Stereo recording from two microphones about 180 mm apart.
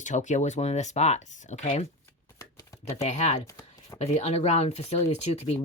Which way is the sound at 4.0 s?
35° left (ahead or behind).